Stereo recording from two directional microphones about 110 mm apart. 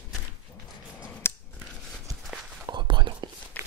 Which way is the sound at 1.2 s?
20° left (ahead or behind).